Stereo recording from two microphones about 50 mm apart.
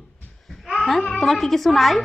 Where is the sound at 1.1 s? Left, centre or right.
Centre.